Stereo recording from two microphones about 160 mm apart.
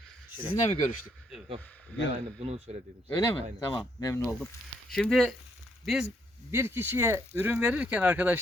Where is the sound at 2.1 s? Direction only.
40° right (ahead or behind).